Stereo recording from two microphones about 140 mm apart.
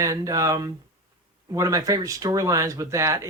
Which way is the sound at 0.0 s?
25° right (ahead or behind).